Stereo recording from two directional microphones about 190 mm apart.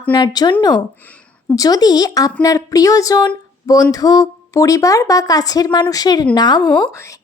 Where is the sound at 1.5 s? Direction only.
20° left (ahead or behind).